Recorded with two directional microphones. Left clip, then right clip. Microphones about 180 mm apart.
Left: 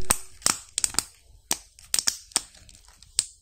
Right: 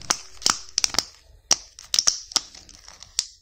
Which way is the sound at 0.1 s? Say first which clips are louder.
Right 4 dB; 10° right (ahead or behind).